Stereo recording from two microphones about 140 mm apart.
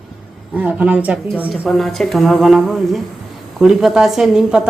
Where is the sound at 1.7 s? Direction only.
Centre (ahead or behind).